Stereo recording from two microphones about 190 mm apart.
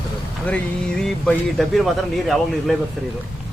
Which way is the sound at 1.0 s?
Centre (ahead or behind).